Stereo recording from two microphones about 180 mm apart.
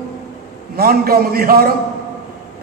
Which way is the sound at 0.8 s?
55° right (ahead or behind).